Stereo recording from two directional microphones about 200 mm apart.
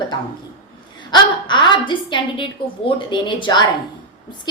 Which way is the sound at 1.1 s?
25° left (ahead or behind).